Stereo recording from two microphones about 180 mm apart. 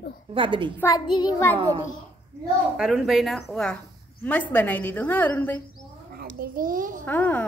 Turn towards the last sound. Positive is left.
turn(degrees=10)  # may be behind; listen again after turning